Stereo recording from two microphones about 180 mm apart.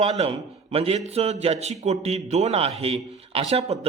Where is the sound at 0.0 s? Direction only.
30° right (ahead or behind).